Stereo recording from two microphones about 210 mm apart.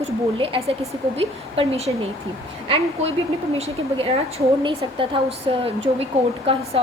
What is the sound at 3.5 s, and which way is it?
A woman's voice, 30° right (ahead or behind).